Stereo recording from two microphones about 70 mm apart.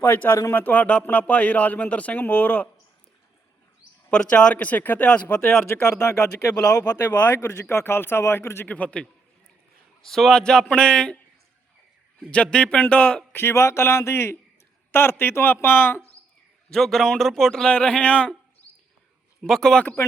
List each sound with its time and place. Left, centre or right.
0.0 s a man's voice: left
4.1 s a man's voice: centre
4.5 s a man's voice: left
5.8 s speech: left
6.7 s speech: left
7.6 s speech: left
8.6 s a man's voice: centre
10.0 s a man's voice: centre
12.3 s a man's voice: centre
13.3 s speech: left
16.6 s a man's voice: centre
19.4 s a man's voice: centre